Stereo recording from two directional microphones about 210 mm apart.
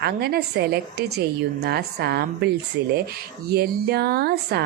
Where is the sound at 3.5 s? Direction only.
50° right (ahead or behind).